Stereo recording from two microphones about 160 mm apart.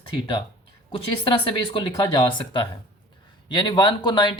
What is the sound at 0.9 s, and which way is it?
Speech, 30° left (ahead or behind).